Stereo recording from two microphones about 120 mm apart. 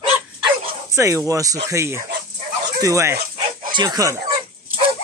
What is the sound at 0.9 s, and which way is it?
Speech, 25° right (ahead or behind).